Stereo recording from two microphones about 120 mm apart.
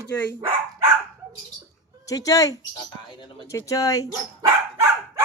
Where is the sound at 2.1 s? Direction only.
30° left (ahead or behind).